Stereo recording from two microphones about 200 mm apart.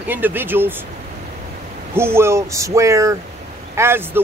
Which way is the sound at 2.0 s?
10° right (ahead or behind).